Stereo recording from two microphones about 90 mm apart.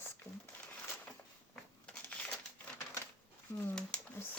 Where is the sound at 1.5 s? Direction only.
10° left (ahead or behind).